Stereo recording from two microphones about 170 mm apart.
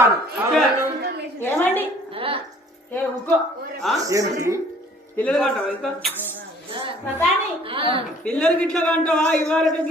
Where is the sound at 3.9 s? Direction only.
20° right (ahead or behind).